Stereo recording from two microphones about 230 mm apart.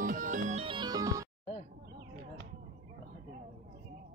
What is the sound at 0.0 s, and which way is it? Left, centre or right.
Music, right.